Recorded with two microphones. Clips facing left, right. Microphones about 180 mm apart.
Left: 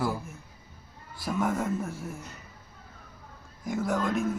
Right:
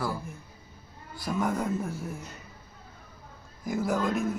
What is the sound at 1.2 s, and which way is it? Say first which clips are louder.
Speech: even; centre (ahead or behind).